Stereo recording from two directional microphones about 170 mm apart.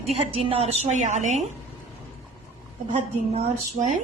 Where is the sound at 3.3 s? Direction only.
40° right (ahead or behind).